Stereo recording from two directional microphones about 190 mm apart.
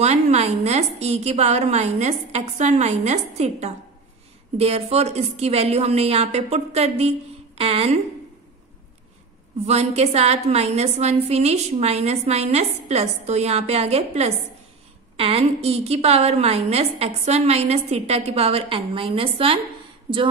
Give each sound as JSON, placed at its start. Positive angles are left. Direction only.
{"t": 0.0, "sound": "a woman's voice", "side_deg": -35}
{"t": 9.7, "sound": "a woman's voice", "side_deg": -35}